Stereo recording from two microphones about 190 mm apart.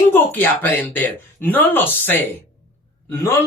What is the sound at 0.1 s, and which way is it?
Speech, 10° left (ahead or behind).